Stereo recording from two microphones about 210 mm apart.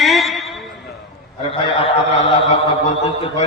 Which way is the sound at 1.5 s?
25° left (ahead or behind).